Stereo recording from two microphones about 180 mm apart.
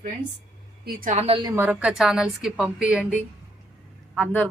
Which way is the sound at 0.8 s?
45° right (ahead or behind).